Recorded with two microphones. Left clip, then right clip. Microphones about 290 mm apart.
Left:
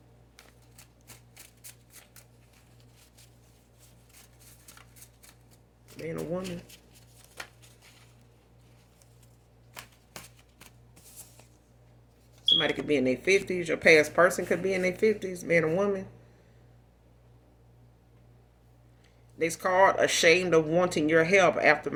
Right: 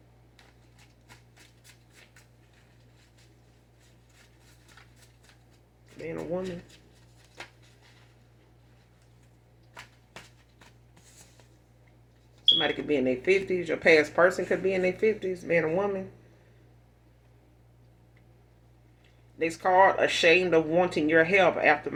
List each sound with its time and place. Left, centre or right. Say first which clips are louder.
6.1 s speech: right 1 dB; left
12.5 s speech: even; left
19.4 s speech: right 2 dB; left